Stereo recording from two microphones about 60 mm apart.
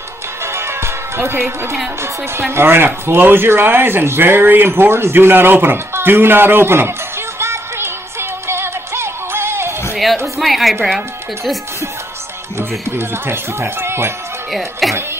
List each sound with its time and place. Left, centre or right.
0.4 s music: right
2.5 s speech: right
9.9 s a woman's voice: centre
12.5 s speech: right
14.5 s a woman's voice: centre